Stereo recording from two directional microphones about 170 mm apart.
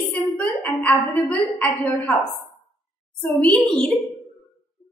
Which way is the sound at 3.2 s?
10° left (ahead or behind).